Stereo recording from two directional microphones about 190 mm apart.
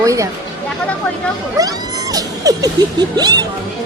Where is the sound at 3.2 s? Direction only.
20° right (ahead or behind).